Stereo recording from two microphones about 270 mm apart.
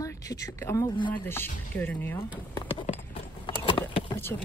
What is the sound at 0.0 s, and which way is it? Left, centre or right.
Speech, centre.